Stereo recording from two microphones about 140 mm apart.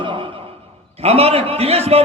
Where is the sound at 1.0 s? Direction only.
45° right (ahead or behind).